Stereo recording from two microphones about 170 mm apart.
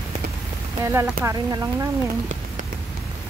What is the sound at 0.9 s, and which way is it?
Speech, 20° right (ahead or behind).